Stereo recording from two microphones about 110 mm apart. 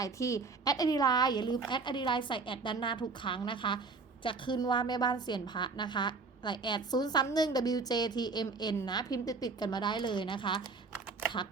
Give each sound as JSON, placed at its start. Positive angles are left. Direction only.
{"t": 0.0, "sound": "a woman's voice", "side_deg": 30}